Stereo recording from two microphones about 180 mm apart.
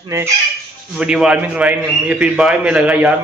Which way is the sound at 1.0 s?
5° right (ahead or behind).